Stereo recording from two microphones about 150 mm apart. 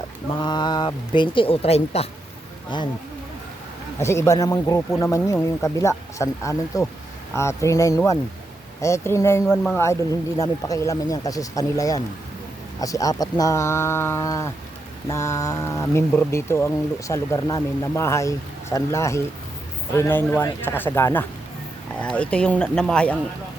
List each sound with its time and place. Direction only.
0.3 s speech: 30° left (ahead or behind)
2.7 s speech: 30° left (ahead or behind)
4.0 s speech: 20° left (ahead or behind)